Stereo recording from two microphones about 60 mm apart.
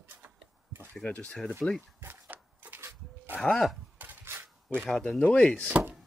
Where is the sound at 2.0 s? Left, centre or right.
Right.